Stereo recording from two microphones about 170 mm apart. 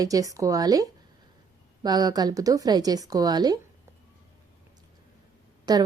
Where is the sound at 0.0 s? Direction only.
20° right (ahead or behind).